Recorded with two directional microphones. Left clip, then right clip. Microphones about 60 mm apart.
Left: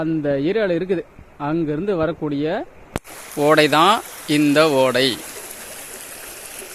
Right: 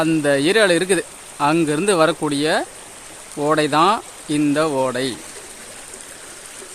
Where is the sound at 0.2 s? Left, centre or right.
Centre.